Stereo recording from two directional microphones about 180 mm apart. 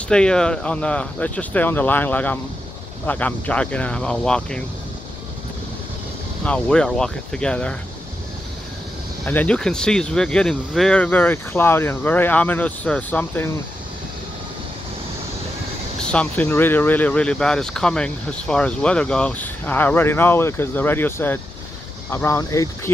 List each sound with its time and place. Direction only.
0.1 s speech: 5° left (ahead or behind)
6.4 s speech: 5° left (ahead or behind)
9.2 s speech: 10° left (ahead or behind)
16.1 s speech: 5° left (ahead or behind)